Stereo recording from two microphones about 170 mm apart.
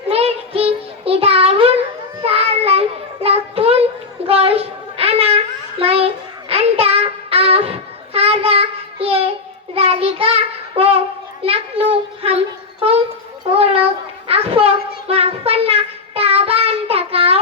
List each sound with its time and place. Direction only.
0.1 s child singing: 35° right (ahead or behind)
11.4 s a sound: 35° right (ahead or behind)
13.5 s child singing: 35° right (ahead or behind)